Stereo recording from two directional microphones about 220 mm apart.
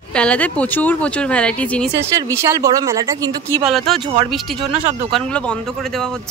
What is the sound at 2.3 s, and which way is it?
Speech, 15° right (ahead or behind).